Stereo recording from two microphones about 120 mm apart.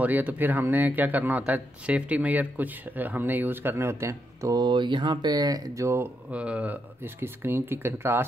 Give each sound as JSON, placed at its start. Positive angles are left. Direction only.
{"t": 0.0, "sound": "speech", "side_deg": -15}
{"t": 6.3, "sound": "speech", "side_deg": -10}